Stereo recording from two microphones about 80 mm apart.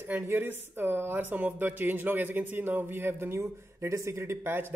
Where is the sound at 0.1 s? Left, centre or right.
Right.